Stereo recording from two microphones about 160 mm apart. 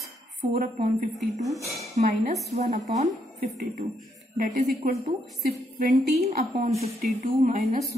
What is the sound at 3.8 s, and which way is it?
A woman's voice, 65° right (ahead or behind).